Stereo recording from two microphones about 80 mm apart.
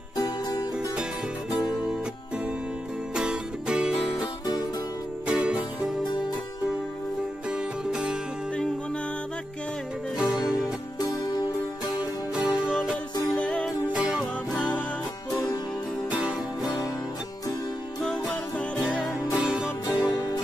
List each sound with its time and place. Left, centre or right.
0.2 s music: left
1.6 s music: centre
3.2 s music: centre
7.4 s music: centre
10.1 s music: centre
11.0 s music: left
12.0 s music: centre
13.3 s music: centre
15.3 s music: left
16.1 s music: centre
18.0 s music: centre
19.3 s music: centre
19.9 s music: left